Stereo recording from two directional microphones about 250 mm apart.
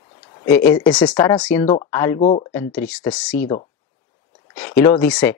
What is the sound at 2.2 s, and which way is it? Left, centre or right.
Speech, left.